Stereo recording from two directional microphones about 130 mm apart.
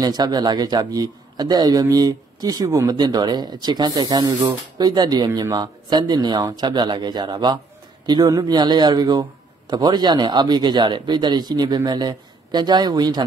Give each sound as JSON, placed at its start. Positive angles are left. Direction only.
{"t": 0.0, "sound": "speech", "side_deg": -30}